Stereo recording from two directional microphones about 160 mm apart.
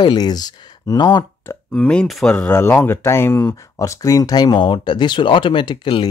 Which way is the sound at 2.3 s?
15° left (ahead or behind).